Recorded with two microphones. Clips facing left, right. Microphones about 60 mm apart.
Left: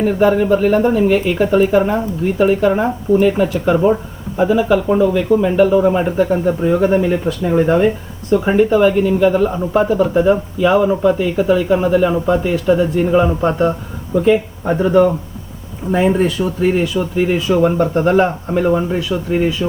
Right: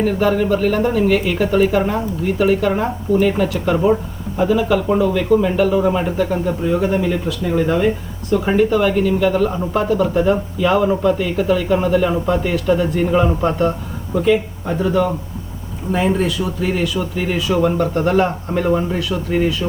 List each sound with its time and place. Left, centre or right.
0.0 s speech: centre